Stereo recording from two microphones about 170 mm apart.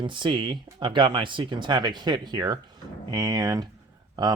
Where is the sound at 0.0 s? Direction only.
30° right (ahead or behind).